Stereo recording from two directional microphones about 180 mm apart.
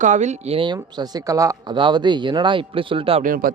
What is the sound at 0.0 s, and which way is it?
A man's voice, 40° right (ahead or behind).